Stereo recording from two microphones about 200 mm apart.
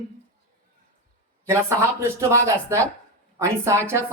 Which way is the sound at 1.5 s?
15° right (ahead or behind).